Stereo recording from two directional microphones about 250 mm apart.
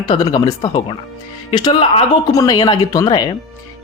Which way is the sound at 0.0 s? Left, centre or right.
Centre.